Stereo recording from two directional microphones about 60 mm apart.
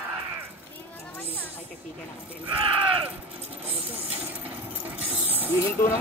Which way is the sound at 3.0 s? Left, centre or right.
Right.